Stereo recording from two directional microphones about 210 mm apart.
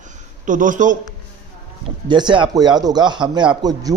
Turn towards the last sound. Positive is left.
turn(degrees=-20)  # may be behind; listen again after turning